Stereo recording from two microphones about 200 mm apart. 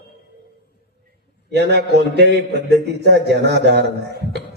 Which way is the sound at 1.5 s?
55° right (ahead or behind).